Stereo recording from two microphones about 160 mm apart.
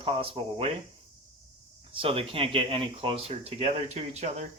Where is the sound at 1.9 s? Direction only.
35° right (ahead or behind).